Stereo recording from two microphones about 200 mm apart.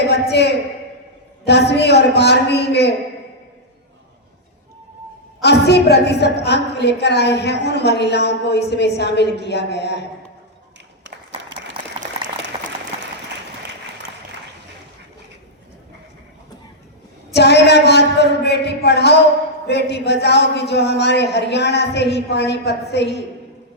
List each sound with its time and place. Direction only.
0.1 s a sound: 55° left (ahead or behind)
1.5 s a woman's voice: 55° left (ahead or behind)
5.4 s a woman's voice: 55° left (ahead or behind)
11.3 s applause: 25° right (ahead or behind)
17.3 s a woman's voice: 55° left (ahead or behind)